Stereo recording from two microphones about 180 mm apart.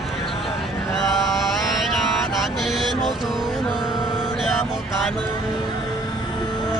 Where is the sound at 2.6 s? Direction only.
Centre (ahead or behind).